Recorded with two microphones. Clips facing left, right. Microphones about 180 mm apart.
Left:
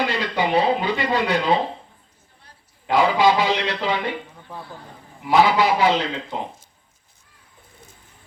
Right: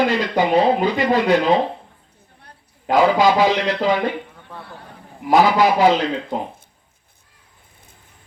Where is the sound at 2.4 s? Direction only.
45° right (ahead or behind).